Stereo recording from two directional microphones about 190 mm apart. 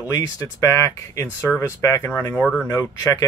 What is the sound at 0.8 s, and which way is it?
Speech, 15° left (ahead or behind).